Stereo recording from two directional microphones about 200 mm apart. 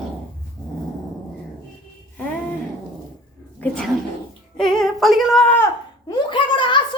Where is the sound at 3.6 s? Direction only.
5° left (ahead or behind).